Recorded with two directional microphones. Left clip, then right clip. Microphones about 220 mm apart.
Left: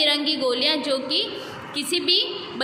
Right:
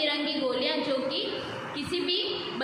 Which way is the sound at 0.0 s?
50° left (ahead or behind).